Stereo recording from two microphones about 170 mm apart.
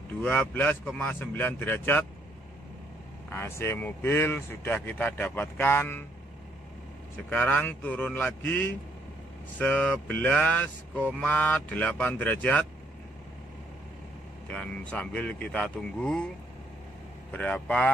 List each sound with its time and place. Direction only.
0.2 s speech: 10° left (ahead or behind)
3.3 s speech: 15° left (ahead or behind)
7.2 s speech: 10° left (ahead or behind)
14.5 s speech: 5° left (ahead or behind)
17.3 s speech: 10° left (ahead or behind)